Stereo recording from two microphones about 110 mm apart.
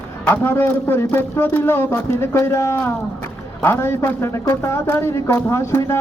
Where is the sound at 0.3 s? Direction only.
20° left (ahead or behind).